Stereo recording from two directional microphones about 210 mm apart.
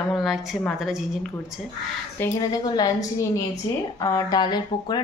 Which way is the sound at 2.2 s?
15° left (ahead or behind).